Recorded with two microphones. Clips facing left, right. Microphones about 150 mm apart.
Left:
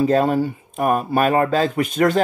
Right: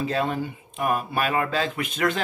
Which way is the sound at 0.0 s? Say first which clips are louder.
Left 9 dB; 45° left (ahead or behind).